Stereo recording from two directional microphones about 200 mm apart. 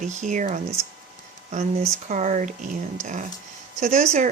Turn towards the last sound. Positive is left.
turn(degrees=-35)  # may be behind; listen again after turning